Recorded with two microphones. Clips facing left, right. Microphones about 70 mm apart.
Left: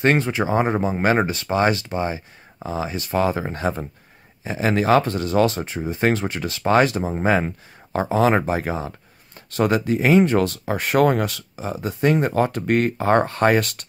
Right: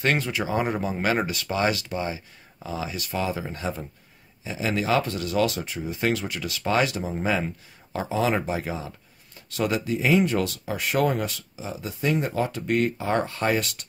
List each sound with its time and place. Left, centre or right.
0.0 s speech: left